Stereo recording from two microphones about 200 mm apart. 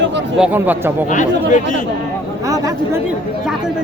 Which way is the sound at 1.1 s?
40° left (ahead or behind).